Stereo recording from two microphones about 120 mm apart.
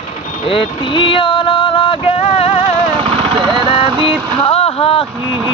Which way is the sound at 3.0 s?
50° right (ahead or behind).